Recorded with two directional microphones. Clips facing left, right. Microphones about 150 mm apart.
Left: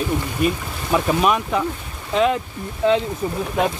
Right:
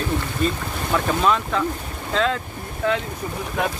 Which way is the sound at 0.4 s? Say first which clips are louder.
Left 2 dB; 15° left (ahead or behind).